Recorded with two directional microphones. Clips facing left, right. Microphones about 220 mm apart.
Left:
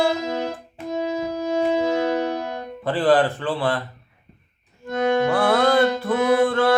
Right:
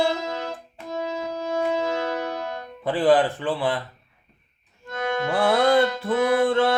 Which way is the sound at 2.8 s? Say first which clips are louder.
Left 1 dB; 15° right (ahead or behind).